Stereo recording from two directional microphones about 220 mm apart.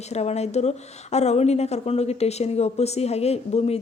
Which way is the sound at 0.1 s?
30° left (ahead or behind).